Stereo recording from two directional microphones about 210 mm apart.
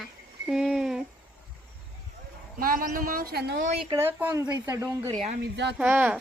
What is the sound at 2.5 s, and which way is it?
A woman's voice, 40° right (ahead or behind).